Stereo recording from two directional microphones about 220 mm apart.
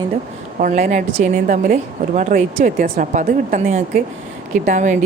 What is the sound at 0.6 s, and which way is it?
A woman's voice, 30° right (ahead or behind).